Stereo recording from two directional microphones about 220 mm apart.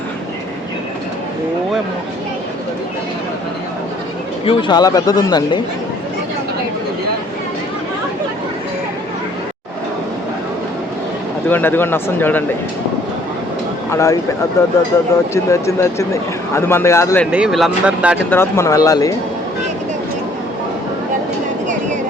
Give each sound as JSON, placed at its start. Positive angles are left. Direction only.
{"t": 4.4, "sound": "speech", "side_deg": 20}
{"t": 11.4, "sound": "speech", "side_deg": 10}
{"t": 13.9, "sound": "speech", "side_deg": 15}
{"t": 17.3, "sound": "speech", "side_deg": 0}
{"t": 18.3, "sound": "speech", "side_deg": 10}